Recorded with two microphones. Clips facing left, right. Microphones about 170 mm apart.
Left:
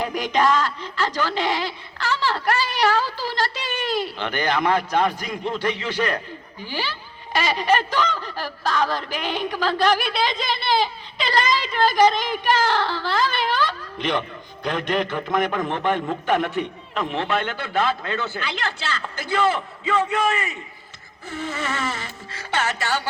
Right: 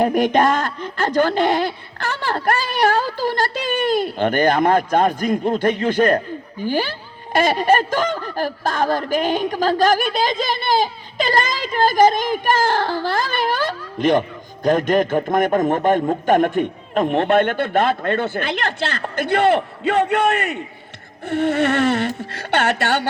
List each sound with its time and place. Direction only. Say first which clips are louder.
0.0 s speech: right 6 dB; 55° right (ahead or behind)